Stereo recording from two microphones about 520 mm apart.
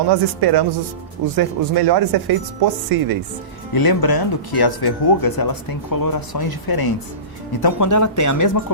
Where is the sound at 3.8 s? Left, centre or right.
Left.